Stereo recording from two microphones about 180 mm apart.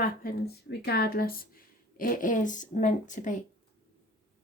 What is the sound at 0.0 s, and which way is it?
Speech, 55° left (ahead or behind).